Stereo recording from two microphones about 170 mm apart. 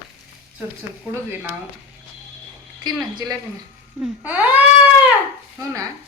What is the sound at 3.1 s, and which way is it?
Speech, 20° right (ahead or behind).